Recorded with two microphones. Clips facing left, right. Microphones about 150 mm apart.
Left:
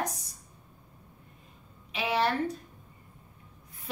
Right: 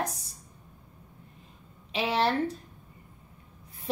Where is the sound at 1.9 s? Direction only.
30° right (ahead or behind).